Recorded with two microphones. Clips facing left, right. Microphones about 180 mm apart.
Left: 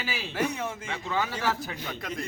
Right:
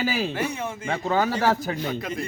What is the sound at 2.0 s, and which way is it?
Speech, centre (ahead or behind).